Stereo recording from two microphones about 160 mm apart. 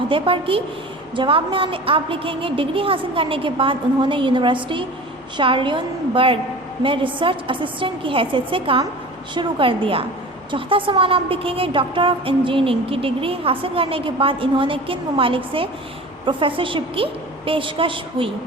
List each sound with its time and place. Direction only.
0.1 s a woman's voice: 35° right (ahead or behind)